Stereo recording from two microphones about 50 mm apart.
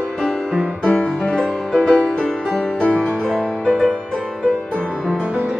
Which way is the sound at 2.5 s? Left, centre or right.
Centre.